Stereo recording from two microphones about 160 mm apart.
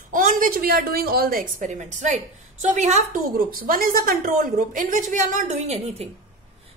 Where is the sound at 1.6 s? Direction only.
50° right (ahead or behind).